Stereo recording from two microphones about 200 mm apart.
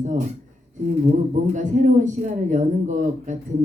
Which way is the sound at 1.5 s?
40° right (ahead or behind).